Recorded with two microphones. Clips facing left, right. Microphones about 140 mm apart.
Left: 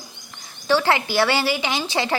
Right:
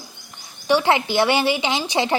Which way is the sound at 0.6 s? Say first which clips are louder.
Right 1 dB; 20° right (ahead or behind).